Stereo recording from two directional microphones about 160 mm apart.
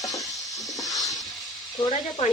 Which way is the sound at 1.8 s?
25° left (ahead or behind).